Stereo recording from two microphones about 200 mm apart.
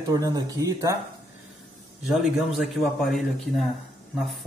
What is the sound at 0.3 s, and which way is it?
Speech, 20° right (ahead or behind).